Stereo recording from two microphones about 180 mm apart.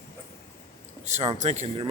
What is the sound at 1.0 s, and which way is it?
Speech, 40° right (ahead or behind).